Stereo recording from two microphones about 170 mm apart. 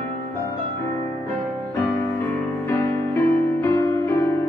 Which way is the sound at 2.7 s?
15° left (ahead or behind).